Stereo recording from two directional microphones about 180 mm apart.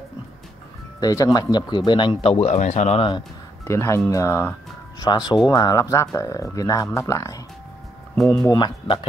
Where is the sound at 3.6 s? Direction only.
15° left (ahead or behind).